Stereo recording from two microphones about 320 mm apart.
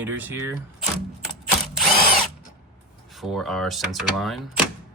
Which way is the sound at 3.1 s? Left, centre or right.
Centre.